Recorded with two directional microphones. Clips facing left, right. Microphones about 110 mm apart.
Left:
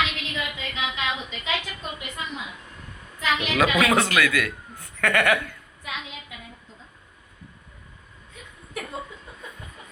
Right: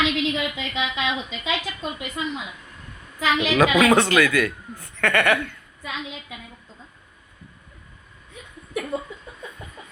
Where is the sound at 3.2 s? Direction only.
90° right.